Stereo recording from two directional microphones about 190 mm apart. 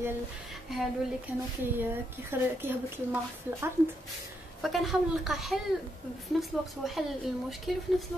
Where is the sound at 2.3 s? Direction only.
10° right (ahead or behind).